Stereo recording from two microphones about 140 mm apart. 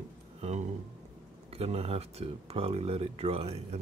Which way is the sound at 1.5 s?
45° right (ahead or behind).